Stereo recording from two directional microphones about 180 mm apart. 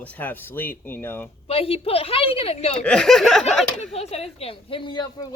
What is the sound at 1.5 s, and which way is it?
Speech, 30° left (ahead or behind).